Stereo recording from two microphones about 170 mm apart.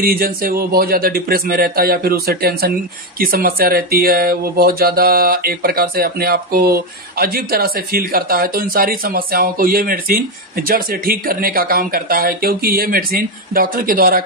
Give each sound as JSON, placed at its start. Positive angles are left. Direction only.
{"t": 0.0, "sound": "speech", "side_deg": -60}